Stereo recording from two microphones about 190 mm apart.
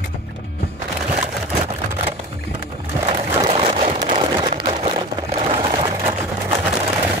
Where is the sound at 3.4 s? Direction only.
30° right (ahead or behind).